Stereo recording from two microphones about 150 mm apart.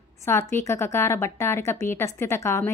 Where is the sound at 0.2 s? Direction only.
15° left (ahead or behind).